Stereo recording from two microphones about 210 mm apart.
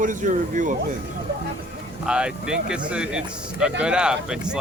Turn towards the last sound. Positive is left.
turn(degrees=-5)  # may be behind; listen again after turning